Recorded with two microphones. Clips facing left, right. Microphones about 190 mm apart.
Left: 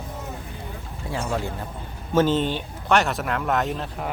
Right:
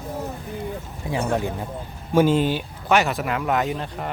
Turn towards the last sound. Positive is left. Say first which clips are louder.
# right 1 dB
turn(degrees=0)  # may be behind; listen again after turning